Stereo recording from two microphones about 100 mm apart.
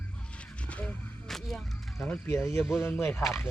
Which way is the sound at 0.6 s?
10° left (ahead or behind).